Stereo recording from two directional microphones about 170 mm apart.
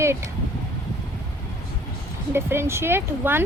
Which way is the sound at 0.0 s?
15° right (ahead or behind).